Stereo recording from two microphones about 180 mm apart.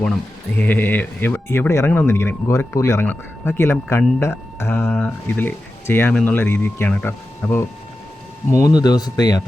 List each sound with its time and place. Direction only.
0.5 s speech: 10° left (ahead or behind)